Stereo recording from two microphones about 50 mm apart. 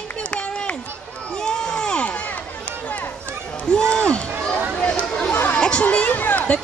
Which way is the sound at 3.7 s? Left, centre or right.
Centre.